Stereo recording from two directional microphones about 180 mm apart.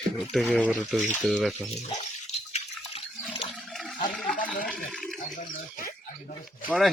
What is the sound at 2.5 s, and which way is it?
Water, 35° left (ahead or behind).